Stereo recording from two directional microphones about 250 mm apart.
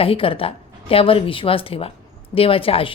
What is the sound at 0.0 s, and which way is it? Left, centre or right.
A woman's voice, left.